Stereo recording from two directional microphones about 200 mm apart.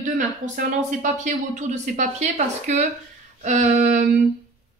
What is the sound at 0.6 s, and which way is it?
A woman's voice, 40° right (ahead or behind).